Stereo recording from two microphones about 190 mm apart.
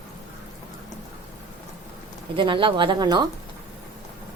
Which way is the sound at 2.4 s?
25° right (ahead or behind).